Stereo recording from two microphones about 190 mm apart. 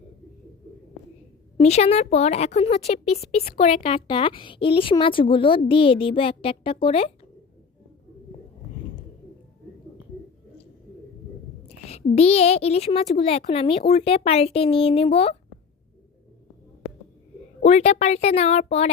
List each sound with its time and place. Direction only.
1.5 s speech: 35° left (ahead or behind)
12.1 s speech: 30° left (ahead or behind)
17.6 s speech: 35° left (ahead or behind)